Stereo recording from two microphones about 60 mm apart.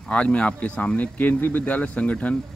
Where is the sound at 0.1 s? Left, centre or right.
Centre.